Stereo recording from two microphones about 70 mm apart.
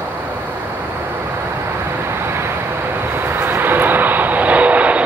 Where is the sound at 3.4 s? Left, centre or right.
Right.